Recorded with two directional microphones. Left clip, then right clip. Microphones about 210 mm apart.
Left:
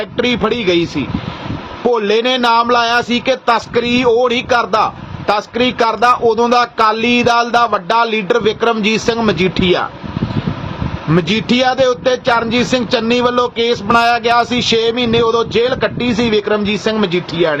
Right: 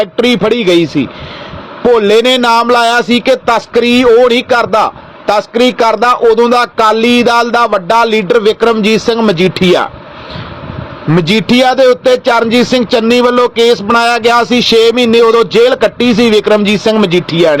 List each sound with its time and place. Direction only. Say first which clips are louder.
0.0 s speech: right 6 dB; 30° right (ahead or behind)
11.1 s a man's voice: right 5 dB; 30° right (ahead or behind)